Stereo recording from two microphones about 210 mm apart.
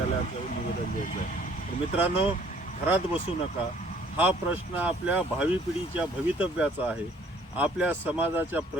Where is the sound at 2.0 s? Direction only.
25° left (ahead or behind).